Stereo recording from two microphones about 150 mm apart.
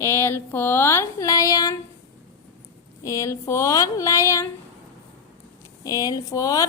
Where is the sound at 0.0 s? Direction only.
15° left (ahead or behind).